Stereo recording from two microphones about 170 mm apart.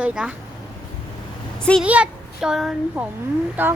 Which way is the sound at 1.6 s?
5° left (ahead or behind).